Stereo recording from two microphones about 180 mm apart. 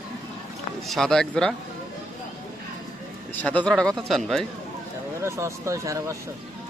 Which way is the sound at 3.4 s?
10° left (ahead or behind).